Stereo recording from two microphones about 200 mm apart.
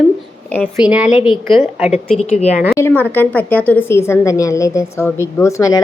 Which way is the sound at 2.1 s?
35° left (ahead or behind).